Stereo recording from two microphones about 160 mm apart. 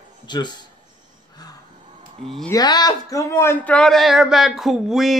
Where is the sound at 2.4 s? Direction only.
25° left (ahead or behind).